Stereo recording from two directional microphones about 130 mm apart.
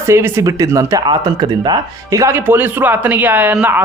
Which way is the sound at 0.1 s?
20° right (ahead or behind).